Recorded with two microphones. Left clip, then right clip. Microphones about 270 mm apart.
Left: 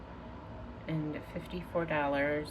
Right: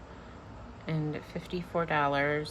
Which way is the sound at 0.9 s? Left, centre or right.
Centre.